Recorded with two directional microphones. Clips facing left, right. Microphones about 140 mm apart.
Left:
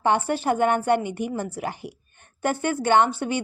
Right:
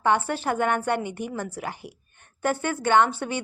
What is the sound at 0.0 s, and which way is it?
A woman's voice, 20° left (ahead or behind).